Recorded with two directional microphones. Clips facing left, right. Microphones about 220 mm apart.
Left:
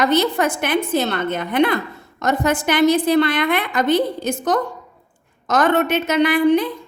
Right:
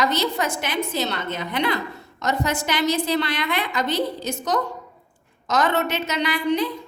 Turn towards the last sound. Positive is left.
turn(degrees=55)  # may be behind; listen again after turning